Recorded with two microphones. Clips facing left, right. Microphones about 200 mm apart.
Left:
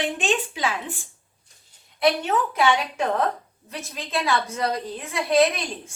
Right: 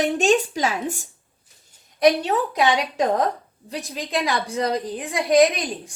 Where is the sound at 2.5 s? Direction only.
15° right (ahead or behind).